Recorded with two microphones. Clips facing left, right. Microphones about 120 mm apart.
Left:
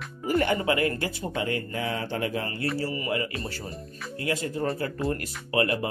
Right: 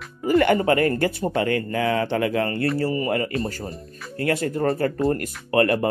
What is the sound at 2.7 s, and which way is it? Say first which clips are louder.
Speech: right 6 dB; 45° right (ahead or behind).